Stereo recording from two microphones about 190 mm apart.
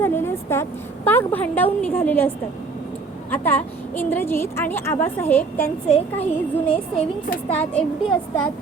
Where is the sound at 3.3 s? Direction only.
10° left (ahead or behind).